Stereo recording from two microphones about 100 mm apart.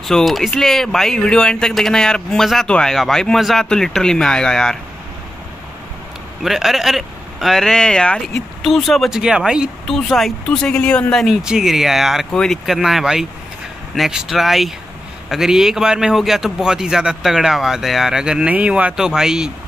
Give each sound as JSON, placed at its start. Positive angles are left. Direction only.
{"t": 0.0, "sound": "speech", "side_deg": 0}
{"t": 6.4, "sound": "speech", "side_deg": 0}
{"t": 11.4, "sound": "speech", "side_deg": -5}